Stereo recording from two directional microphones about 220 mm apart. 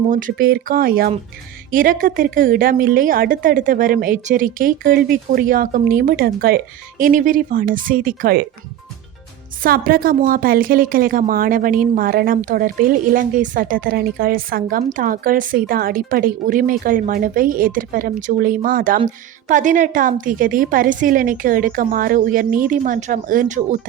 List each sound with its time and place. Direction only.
0.1 s a woman's voice: 40° right (ahead or behind)
9.6 s a woman's voice: 40° right (ahead or behind)